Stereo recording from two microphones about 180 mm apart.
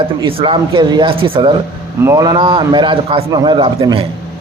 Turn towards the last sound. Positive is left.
turn(degrees=-25)  # may be behind; listen again after turning